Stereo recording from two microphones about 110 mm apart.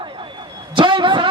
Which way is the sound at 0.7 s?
50° right (ahead or behind).